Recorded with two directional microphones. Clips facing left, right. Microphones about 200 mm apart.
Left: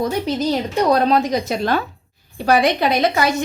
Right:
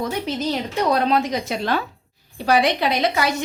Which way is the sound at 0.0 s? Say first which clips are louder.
Left 4 dB; 40° left (ahead or behind).